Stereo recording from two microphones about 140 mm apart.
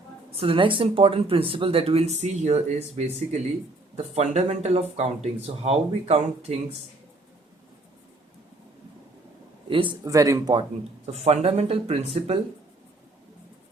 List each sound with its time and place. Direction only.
0.3 s speech: 40° right (ahead or behind)
9.6 s speech: 40° right (ahead or behind)
10.0 s speech: 25° right (ahead or behind); by 12.4 s 45° right (ahead or behind)